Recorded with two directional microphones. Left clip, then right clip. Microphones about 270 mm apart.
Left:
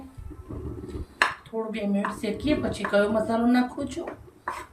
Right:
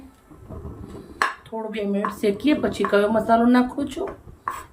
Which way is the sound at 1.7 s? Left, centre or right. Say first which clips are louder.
Right 7 dB; centre.